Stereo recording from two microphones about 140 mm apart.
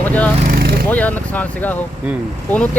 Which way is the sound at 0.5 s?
90° right.